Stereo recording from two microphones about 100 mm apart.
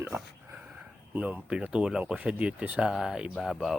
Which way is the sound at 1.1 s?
15° right (ahead or behind).